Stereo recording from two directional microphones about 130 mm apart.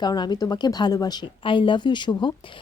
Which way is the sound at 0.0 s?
30° left (ahead or behind).